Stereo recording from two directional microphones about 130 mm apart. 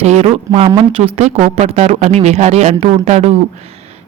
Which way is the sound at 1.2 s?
60° right (ahead or behind).